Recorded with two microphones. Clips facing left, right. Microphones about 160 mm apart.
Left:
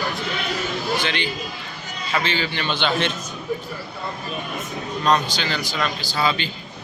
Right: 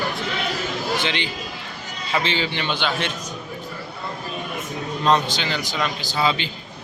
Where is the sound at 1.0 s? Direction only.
20° right (ahead or behind).